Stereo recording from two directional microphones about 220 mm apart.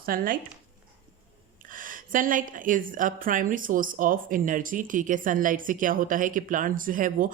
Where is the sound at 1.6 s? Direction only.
40° right (ahead or behind).